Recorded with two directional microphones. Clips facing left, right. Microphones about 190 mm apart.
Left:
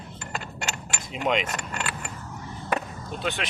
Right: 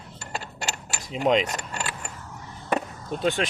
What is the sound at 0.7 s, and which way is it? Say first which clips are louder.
Keys jangling: right 1 dB; 35° right (ahead or behind).